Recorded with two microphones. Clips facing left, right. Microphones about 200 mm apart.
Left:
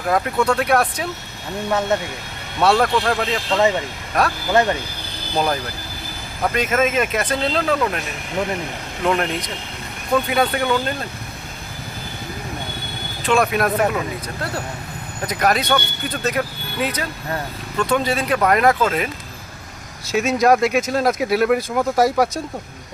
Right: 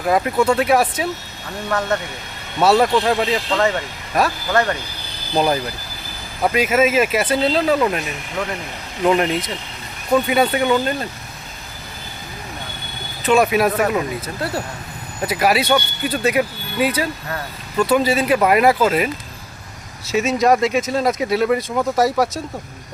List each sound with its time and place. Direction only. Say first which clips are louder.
0.1 s speech: right 2 dB; 5° right (ahead or behind)
2.6 s speech: right 2 dB; 5° right (ahead or behind)
4.5 s speech: left 2 dB; 20° left (ahead or behind)
6.4 s speech: right 3 dB; 5° right (ahead or behind)
9.0 s speech: right 4 dB; 5° right (ahead or behind)
13.2 s speech: right 3 dB; 5° right (ahead or behind)
15.3 s speech: right 2 dB; 5° right (ahead or behind)